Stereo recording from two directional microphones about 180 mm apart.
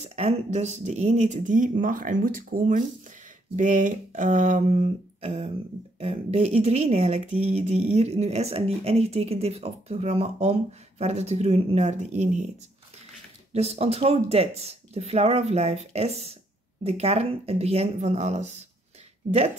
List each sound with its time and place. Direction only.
0.0 s speech: 35° right (ahead or behind)
13.5 s speech: 35° right (ahead or behind)